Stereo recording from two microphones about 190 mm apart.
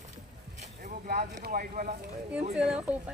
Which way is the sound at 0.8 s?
55° right (ahead or behind).